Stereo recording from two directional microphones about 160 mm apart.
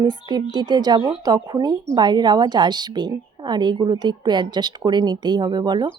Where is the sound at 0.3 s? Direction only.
25° right (ahead or behind).